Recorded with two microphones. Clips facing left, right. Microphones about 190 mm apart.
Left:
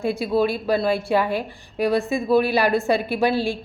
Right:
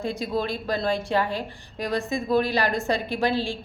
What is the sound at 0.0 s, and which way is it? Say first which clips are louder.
A woman's voice: left 6 dB; 10° left (ahead or behind).